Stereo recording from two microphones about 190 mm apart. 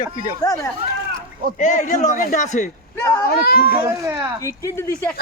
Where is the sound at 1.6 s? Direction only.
40° left (ahead or behind).